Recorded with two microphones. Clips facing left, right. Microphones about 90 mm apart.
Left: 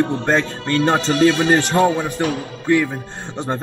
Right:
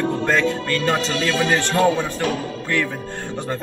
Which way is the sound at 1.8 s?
15° left (ahead or behind).